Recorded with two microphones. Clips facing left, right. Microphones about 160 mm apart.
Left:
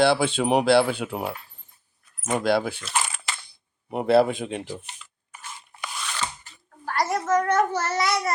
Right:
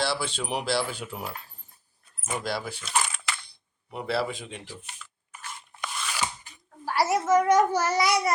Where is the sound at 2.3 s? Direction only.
60° left (ahead or behind).